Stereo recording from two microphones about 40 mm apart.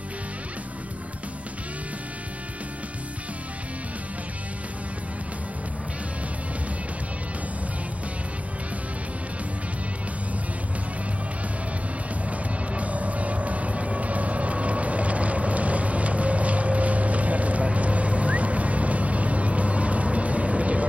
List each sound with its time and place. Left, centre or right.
12.3 s vehicle: right